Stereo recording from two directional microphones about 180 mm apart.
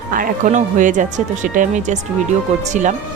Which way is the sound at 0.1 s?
45° right (ahead or behind).